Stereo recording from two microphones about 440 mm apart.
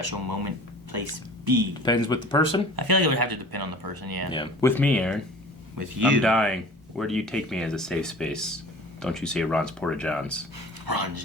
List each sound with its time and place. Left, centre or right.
0.0 s speech: right
1.8 s speech: centre
2.7 s speech: right
4.3 s speech: centre
5.7 s speech: right
6.2 s speech: centre
10.8 s speech: right